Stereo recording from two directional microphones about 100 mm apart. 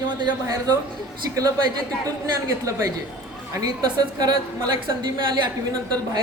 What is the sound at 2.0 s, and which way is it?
A woman's voice, 35° right (ahead or behind).